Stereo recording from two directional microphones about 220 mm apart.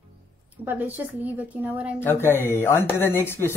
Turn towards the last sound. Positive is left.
turn(degrees=10)  # may be behind; listen again after turning